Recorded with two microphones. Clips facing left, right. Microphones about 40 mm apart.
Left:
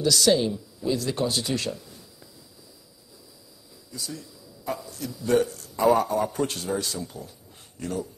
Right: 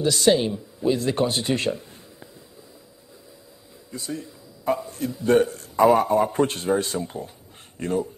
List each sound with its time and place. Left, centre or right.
0.0 s speech: right
3.9 s a man's voice: right